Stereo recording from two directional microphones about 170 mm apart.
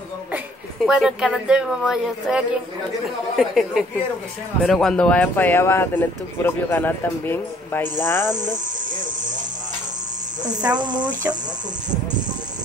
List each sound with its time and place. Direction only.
0.8 s speech: 5° right (ahead or behind); by 8.3 s 15° left (ahead or behind)
10.4 s speech: 25° right (ahead or behind)